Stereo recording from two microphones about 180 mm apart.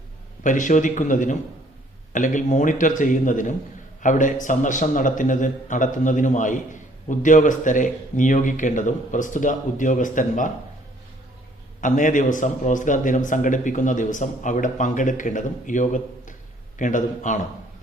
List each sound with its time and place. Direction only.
0.4 s a man's voice: 45° left (ahead or behind)
11.8 s a man's voice: 45° left (ahead or behind)